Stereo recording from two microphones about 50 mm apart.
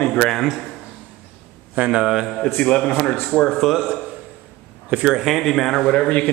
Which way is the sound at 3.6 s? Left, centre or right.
Centre.